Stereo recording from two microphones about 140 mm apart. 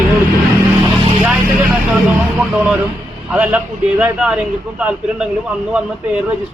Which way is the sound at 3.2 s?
10° right (ahead or behind).